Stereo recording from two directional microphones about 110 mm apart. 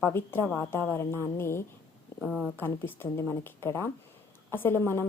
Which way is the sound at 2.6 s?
20° left (ahead or behind).